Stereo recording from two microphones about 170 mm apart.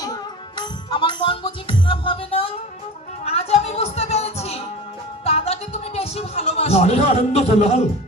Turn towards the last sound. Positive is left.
turn(degrees=40)  # may be behind; listen again after turning